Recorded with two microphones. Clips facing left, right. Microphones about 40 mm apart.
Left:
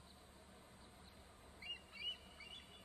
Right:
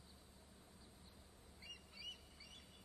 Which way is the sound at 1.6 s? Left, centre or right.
Left.